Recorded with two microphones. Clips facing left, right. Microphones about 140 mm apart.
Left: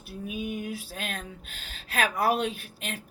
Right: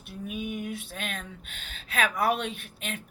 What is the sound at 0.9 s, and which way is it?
Speech, 35° left (ahead or behind).